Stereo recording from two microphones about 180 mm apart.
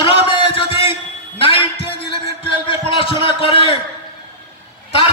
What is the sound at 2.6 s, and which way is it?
Music, 30° left (ahead or behind).